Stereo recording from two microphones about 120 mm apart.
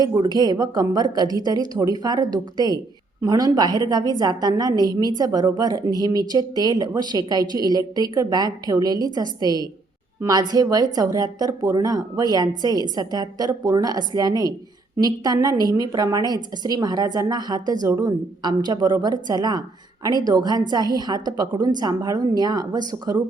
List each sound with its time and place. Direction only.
0.0 s a woman's voice: 35° right (ahead or behind)